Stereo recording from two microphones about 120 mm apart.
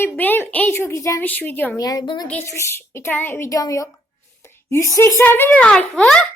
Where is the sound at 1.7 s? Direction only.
30° left (ahead or behind).